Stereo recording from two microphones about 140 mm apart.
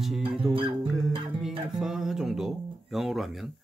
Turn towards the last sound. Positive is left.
turn(degrees=0)  # may be behind; listen again after turning